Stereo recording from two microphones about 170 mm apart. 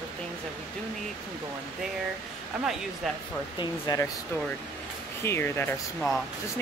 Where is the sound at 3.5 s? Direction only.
25° left (ahead or behind).